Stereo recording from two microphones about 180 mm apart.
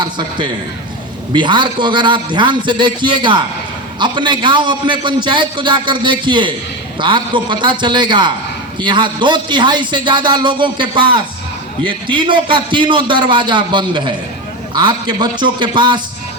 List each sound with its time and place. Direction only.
0.0 s a man's voice: 25° right (ahead or behind)